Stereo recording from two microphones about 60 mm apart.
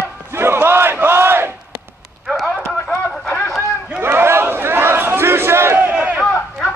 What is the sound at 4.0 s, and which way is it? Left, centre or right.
Battle cry, right.